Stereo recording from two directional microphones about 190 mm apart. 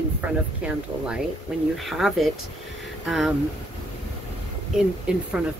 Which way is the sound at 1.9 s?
Centre (ahead or behind).